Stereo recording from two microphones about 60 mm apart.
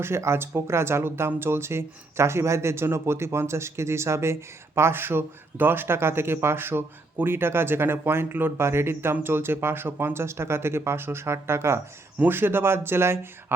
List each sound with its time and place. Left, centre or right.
0.0 s speech: right
12.2 s speech: right